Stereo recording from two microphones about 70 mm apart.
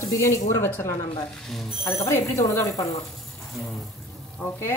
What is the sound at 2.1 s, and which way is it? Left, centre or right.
Speech, left.